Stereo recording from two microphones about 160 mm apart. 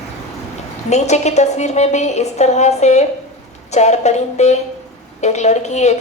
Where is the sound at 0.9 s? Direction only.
45° left (ahead or behind).